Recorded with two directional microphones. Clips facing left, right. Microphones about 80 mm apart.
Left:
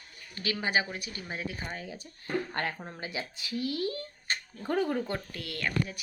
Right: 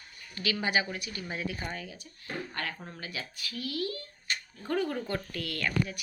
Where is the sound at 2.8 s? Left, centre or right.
Left.